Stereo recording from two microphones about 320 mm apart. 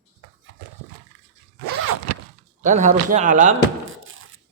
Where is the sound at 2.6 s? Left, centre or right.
Right.